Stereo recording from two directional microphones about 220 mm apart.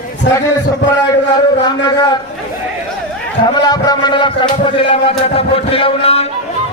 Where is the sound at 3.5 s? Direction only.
20° left (ahead or behind).